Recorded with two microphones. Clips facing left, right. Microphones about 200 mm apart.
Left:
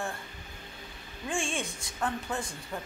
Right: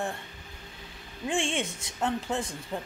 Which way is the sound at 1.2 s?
25° right (ahead or behind).